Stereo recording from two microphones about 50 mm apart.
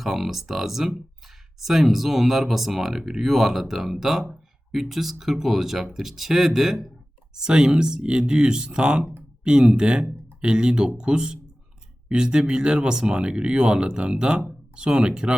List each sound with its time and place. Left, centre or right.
0.0 s speech: centre
7.3 s speech: centre